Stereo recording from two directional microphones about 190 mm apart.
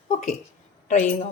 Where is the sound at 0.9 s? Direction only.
40° left (ahead or behind).